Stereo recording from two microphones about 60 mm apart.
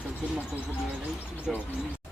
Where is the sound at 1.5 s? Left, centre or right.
Centre.